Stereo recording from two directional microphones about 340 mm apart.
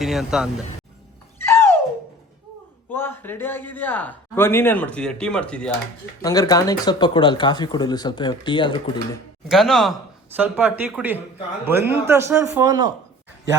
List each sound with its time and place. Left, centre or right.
0.0 s a man's voice: centre
1.4 s music: centre
2.9 s a man's voice: centre
9.5 s a man's voice: centre